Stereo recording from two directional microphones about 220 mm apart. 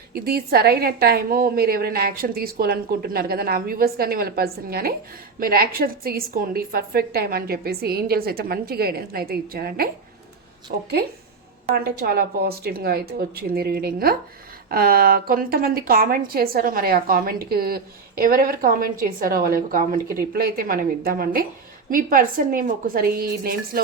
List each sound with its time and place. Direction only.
0.1 s a woman's voice: 45° right (ahead or behind)